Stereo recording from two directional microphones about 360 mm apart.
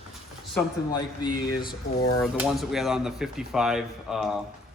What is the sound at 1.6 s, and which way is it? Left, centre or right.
Speech, left.